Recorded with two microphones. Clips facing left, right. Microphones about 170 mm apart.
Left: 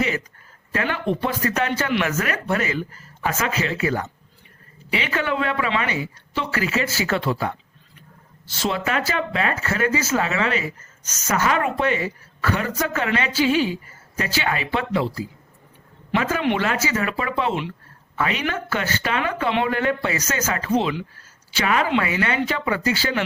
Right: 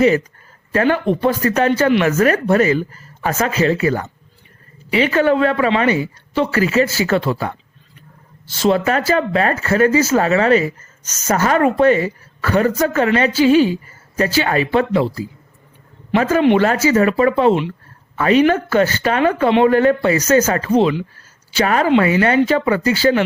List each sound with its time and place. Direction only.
0.7 s speech: 40° right (ahead or behind)
8.6 s speech: 40° right (ahead or behind)